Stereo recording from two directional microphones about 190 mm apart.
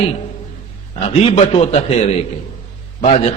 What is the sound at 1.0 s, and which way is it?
A man's voice, 35° left (ahead or behind).